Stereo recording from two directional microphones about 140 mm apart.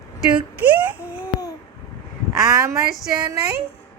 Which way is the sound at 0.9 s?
10° right (ahead or behind).